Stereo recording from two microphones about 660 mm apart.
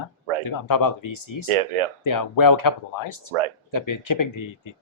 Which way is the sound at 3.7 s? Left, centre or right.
Left.